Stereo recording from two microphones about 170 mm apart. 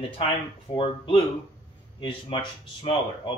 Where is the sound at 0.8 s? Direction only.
30° left (ahead or behind).